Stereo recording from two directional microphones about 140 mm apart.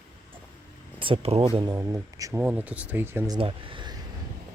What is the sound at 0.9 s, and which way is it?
Speech, 40° right (ahead or behind).